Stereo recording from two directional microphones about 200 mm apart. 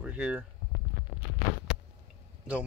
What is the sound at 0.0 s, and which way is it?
Speech, 5° right (ahead or behind).